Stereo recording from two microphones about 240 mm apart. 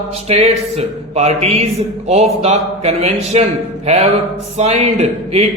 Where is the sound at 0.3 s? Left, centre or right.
Right.